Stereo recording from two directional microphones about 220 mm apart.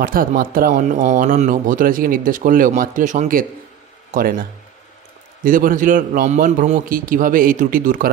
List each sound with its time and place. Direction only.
0.0 s speech: 40° right (ahead or behind)